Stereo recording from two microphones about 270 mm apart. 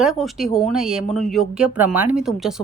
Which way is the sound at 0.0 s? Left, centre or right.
Centre.